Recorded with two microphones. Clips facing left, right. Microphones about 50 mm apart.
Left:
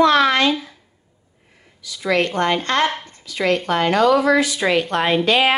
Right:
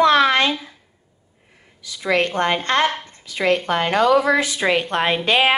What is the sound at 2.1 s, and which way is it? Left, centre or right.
A woman's voice, right.